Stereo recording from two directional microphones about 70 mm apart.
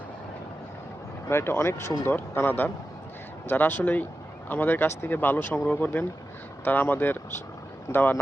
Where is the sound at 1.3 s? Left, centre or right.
Left.